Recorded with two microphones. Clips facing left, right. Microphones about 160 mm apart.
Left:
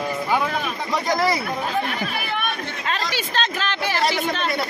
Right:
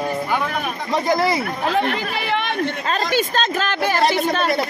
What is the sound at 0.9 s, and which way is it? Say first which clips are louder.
Speech: right 3 dB; 25° right (ahead or behind).